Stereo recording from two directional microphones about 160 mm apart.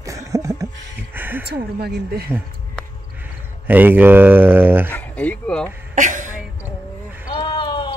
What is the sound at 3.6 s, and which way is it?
Speech, 10° right (ahead or behind).